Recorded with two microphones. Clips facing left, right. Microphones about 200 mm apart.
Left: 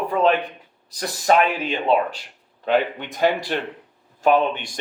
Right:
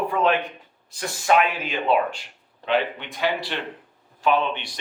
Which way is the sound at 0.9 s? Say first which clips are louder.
Left 2 dB; 40° left (ahead or behind).